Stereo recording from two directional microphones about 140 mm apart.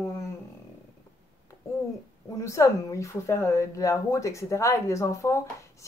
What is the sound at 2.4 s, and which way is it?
Speech, 20° left (ahead or behind).